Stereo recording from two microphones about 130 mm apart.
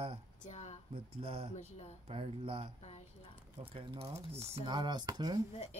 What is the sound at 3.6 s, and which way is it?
Speech, 45° right (ahead or behind).